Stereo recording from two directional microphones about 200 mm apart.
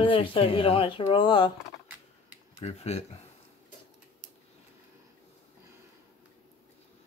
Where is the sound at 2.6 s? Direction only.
35° left (ahead or behind).